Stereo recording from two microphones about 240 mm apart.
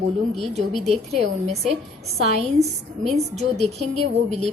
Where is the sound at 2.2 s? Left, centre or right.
Right.